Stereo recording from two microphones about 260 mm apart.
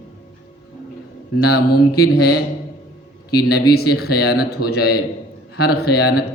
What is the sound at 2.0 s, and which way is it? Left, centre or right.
Speech, left.